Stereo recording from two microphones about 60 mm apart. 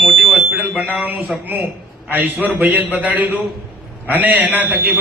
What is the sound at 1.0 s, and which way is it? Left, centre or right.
A man's voice, right.